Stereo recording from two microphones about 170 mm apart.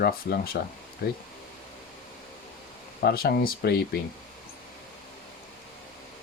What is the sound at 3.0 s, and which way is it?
Speech, 65° left (ahead or behind).